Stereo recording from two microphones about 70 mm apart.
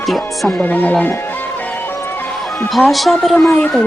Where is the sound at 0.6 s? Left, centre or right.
Left.